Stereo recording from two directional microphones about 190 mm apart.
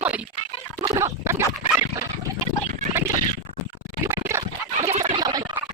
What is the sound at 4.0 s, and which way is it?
Scratch, 15° right (ahead or behind).